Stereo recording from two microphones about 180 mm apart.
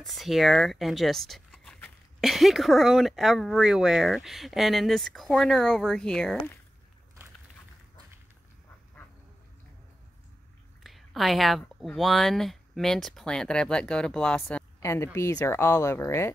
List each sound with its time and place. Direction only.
0.0 s speech: centre (ahead or behind)
10.8 s speech: centre (ahead or behind)
14.8 s a woman's voice: 15° left (ahead or behind)